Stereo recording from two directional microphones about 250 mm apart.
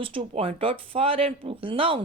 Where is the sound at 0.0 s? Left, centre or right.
Right.